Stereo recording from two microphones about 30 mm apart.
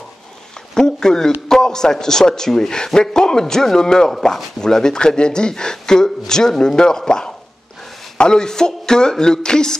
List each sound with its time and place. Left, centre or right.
0.7 s a man's voice: left